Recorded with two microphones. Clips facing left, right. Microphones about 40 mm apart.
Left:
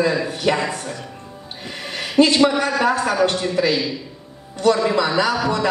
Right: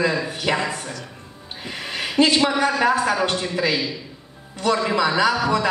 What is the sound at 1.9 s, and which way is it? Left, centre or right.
A man's voice, centre.